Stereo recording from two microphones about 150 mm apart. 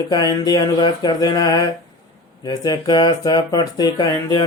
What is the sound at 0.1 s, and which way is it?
Speech, 25° left (ahead or behind).